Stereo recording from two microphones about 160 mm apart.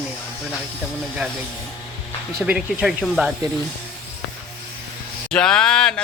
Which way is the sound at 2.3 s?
10° right (ahead or behind).